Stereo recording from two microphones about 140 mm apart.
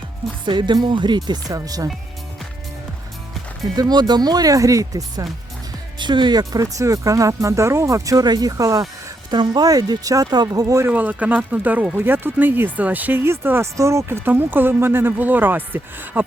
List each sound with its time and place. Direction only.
0.4 s speech: 35° right (ahead or behind)
3.8 s speech: 30° right (ahead or behind)
10.8 s speech: 10° right (ahead or behind)